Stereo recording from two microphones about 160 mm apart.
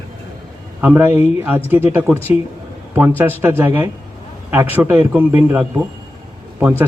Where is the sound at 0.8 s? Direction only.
10° right (ahead or behind).